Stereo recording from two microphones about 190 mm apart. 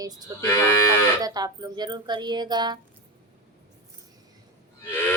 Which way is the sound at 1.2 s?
20° right (ahead or behind).